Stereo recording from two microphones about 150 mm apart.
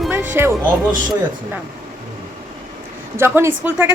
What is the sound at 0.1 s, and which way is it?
Music, 15° right (ahead or behind).